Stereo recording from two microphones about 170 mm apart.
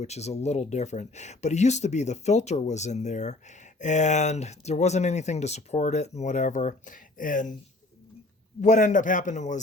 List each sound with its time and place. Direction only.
0.0 s speech: 40° left (ahead or behind)
8.6 s speech: 45° left (ahead or behind)